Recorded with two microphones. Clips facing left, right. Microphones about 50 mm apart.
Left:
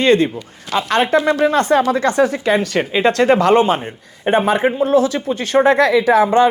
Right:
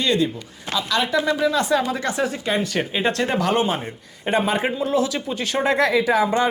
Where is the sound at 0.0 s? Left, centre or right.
Left.